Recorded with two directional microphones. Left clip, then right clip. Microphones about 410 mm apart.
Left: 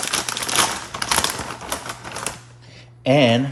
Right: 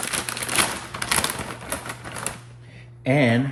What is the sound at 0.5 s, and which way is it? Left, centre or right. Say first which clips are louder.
Typewriter: left 3 dB; centre.